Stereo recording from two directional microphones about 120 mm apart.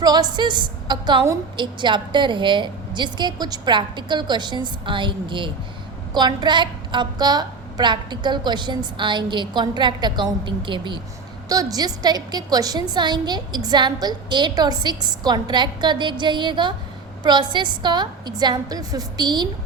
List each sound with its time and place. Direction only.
0.0 s a woman's voice: 35° right (ahead or behind)
11.4 s a woman's voice: 30° right (ahead or behind)